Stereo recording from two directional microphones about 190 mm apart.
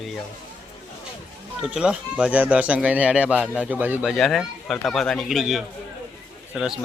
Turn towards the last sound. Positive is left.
turn(degrees=0)  # may be behind; listen again after turning